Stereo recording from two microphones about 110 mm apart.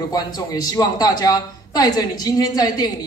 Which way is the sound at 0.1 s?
35° left (ahead or behind).